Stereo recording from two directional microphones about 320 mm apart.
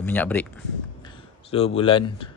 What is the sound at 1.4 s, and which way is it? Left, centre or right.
Speech, centre.